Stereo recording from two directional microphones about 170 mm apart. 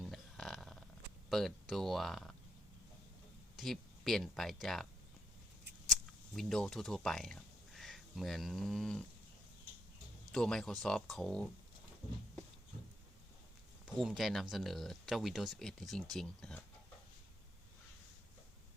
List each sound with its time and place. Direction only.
0.0 s a sound: centre (ahead or behind)
1.3 s speech: centre (ahead or behind)
3.6 s speech: centre (ahead or behind)
6.3 s speech: centre (ahead or behind)
10.3 s speech: 5° left (ahead or behind)
13.8 s speech: centre (ahead or behind)